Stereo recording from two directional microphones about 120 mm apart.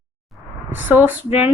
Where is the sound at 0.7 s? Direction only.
15° right (ahead or behind).